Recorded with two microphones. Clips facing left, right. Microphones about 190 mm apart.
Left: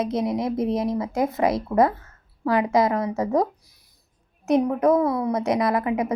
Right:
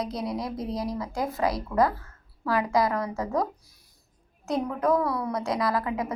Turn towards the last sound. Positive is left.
turn(degrees=20)  # may be behind; listen again after turning